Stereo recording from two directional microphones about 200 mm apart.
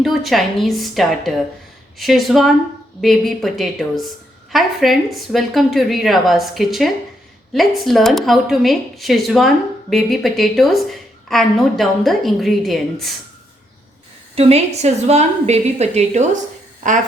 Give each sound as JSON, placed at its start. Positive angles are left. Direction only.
{"t": 0.0, "sound": "a woman's voice", "side_deg": 0}
{"t": 14.3, "sound": "a woman's voice", "side_deg": -30}